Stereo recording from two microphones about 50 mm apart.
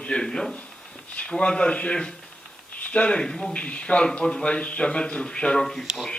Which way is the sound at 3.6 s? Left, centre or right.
Left.